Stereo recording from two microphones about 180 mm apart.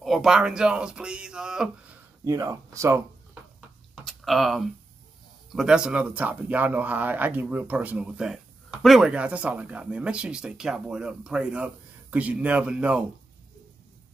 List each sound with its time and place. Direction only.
0.0 s speech: centre (ahead or behind)
2.2 s speech: 15° right (ahead or behind)
3.9 s a sound: centre (ahead or behind)
5.5 s speech: 5° right (ahead or behind)